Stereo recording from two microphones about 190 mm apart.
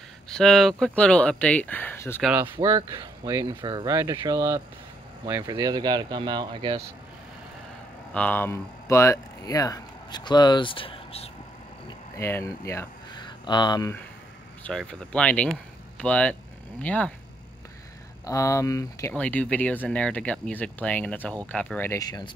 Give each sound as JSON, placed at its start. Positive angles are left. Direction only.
{"t": 0.3, "sound": "speech", "side_deg": 5}
{"t": 2.2, "sound": "speech", "side_deg": -10}
{"t": 8.1, "sound": "speech", "side_deg": 5}
{"t": 12.2, "sound": "speech", "side_deg": 15}
{"t": 14.6, "sound": "speech", "side_deg": 5}
{"t": 18.2, "sound": "speech", "side_deg": 15}